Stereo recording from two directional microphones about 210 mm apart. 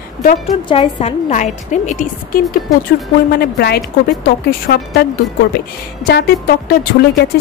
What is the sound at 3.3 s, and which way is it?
Speech, 50° left (ahead or behind).